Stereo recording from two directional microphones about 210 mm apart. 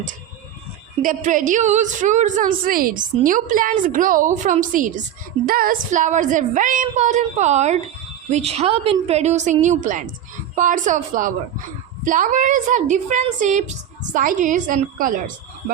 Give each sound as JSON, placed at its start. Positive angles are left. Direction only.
{"t": 1.0, "sound": "a woman's voice", "side_deg": -40}